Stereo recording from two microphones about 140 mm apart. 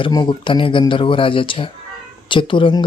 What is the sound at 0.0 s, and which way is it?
Speech, 35° left (ahead or behind).